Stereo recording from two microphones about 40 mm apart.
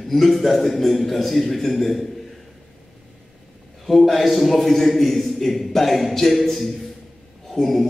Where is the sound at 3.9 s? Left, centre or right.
Centre.